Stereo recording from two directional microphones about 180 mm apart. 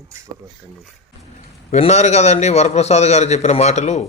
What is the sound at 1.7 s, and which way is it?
A man's voice, 40° left (ahead or behind).